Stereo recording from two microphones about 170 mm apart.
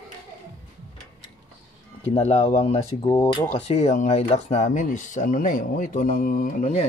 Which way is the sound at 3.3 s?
30° left (ahead or behind).